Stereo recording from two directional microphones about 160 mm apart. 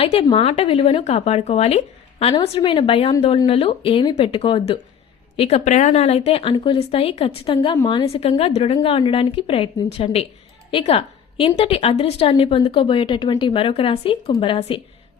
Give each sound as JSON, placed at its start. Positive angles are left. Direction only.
{"t": 0.0, "sound": "speech", "side_deg": 35}